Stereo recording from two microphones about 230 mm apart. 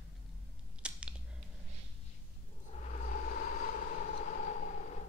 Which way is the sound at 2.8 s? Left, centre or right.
Left.